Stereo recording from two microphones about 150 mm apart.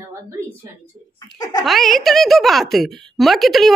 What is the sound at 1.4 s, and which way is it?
Speech, 25° left (ahead or behind).